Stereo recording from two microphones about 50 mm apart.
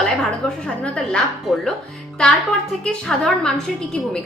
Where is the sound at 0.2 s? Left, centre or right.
Centre.